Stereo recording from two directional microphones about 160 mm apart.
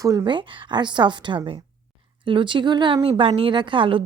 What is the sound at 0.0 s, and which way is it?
Speech, 20° right (ahead or behind).